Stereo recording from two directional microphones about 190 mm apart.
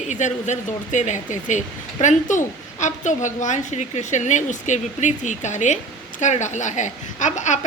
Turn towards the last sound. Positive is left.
turn(degrees=40)  # may be behind; listen again after turning